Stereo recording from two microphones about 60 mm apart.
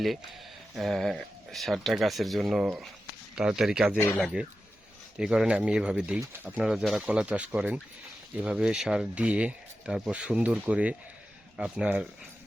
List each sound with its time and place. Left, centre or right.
0.8 s speech: centre
7.1 s speech: right
9.1 s speech: centre